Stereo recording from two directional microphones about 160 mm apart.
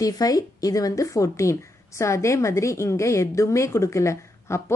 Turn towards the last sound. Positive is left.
turn(degrees=20)  # may be behind; listen again after turning